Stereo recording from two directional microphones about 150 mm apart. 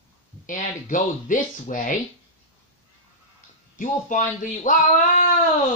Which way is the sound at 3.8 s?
60° left (ahead or behind).